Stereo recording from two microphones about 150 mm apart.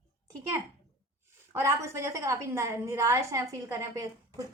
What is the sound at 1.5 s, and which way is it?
A woman's voice, 20° right (ahead or behind).